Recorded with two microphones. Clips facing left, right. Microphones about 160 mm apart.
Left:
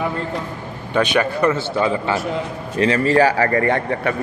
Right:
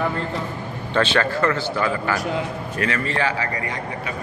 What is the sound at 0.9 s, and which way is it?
A man's voice, 15° left (ahead or behind).